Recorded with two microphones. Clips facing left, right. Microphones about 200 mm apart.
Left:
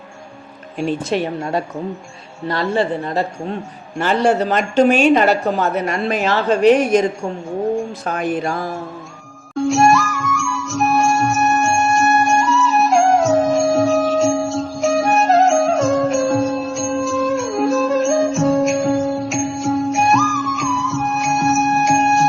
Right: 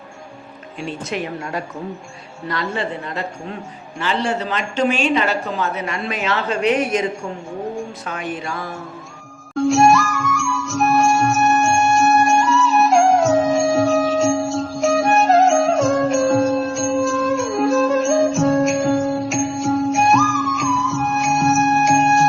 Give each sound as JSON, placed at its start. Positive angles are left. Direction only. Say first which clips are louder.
{"t": 1.1, "sound": "speech", "louder": "left 3 dB", "side_deg": 30}
{"t": 3.9, "sound": "a woman's voice", "louder": "left 6 dB", "side_deg": 50}
{"t": 6.0, "sound": "speech", "louder": "left 4 dB", "side_deg": 35}
{"t": 9.6, "sound": "music", "louder": "even", "side_deg": 0}